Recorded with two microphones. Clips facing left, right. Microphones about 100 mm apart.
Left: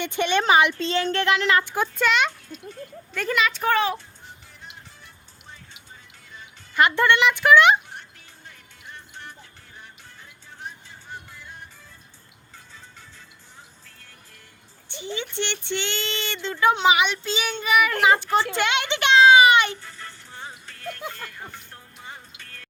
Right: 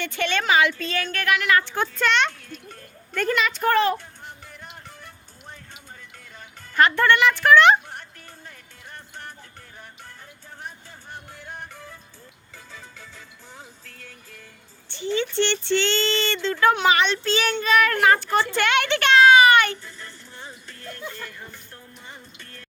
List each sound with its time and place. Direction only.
0.0 s speech: 20° left (ahead or behind)
1.6 s speech: 5° left (ahead or behind)
2.5 s a sound: 50° right (ahead or behind)
3.2 s speech: centre (ahead or behind)
3.9 s music: 55° right (ahead or behind)
6.7 s speech: 20° left (ahead or behind)
8.4 s music: 45° right (ahead or behind)
10.6 s music: 55° right (ahead or behind); by 11.9 s 70° right (ahead or behind)
12.5 s music: 90° right
14.8 s speech: 15° left (ahead or behind)
18.5 s a sound: 20° left (ahead or behind)